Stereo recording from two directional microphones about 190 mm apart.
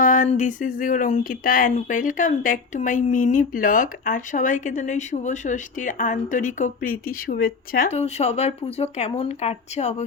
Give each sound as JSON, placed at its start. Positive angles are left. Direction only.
{"t": 0.0, "sound": "speech", "side_deg": 45}
{"t": 7.9, "sound": "speech", "side_deg": 35}